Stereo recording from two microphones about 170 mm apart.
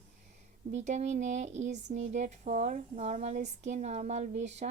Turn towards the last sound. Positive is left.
turn(degrees=-40)  # may be behind; listen again after turning